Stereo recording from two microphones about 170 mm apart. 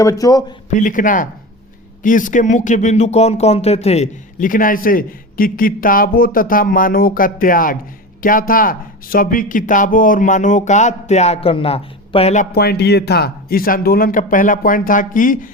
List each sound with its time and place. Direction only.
0.0 s speech: 20° left (ahead or behind)
0.7 s speech: 50° left (ahead or behind)
12.5 s speech: 70° left (ahead or behind); by 15.4 s 55° left (ahead or behind)